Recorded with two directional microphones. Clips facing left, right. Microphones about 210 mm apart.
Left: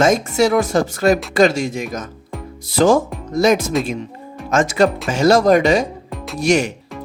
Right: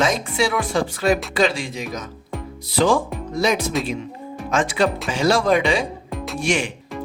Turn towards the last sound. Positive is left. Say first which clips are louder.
# left 6 dB
turn(degrees=40)  # may be behind; listen again after turning